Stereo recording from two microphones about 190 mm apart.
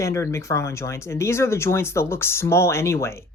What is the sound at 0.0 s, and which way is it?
Speech, 15° left (ahead or behind).